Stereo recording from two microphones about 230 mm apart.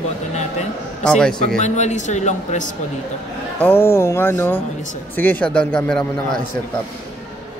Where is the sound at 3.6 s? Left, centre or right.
Centre.